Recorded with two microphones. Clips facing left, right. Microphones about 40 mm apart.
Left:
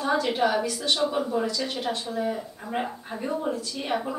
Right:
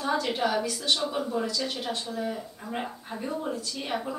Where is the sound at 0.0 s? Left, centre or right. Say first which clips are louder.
Left 3 dB; centre.